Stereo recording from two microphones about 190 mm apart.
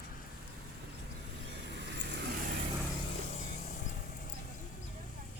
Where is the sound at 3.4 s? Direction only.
40° left (ahead or behind).